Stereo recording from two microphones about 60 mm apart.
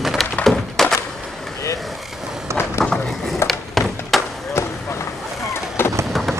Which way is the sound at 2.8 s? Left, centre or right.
Centre.